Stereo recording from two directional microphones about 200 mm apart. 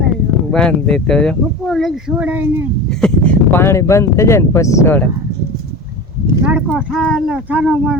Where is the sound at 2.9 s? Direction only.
5° left (ahead or behind).